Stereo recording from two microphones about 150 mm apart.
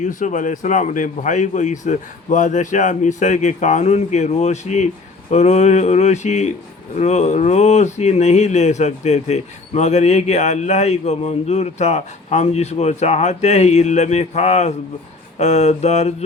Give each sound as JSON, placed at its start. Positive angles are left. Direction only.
{"t": 0.0, "sound": "speech", "side_deg": 55}